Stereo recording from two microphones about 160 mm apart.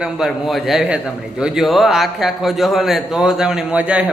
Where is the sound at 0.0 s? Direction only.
Centre (ahead or behind).